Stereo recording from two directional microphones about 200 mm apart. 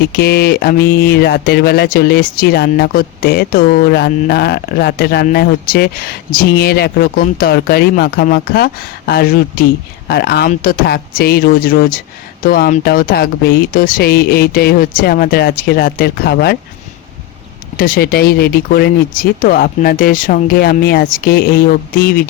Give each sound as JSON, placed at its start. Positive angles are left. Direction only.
{"t": 0.1, "sound": "mantra", "side_deg": 50}
{"t": 17.7, "sound": "mantra", "side_deg": 50}